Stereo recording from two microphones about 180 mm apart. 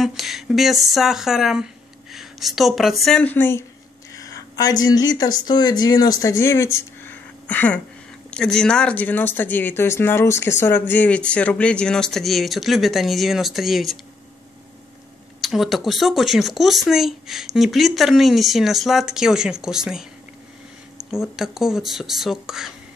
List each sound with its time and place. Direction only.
0.0 s speech: centre (ahead or behind)
15.4 s speech: centre (ahead or behind)
21.1 s speech: centre (ahead or behind)